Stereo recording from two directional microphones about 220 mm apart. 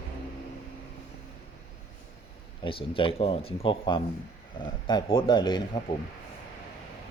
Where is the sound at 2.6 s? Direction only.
25° left (ahead or behind).